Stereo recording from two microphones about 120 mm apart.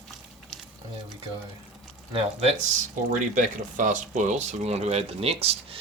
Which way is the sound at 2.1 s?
55° right (ahead or behind).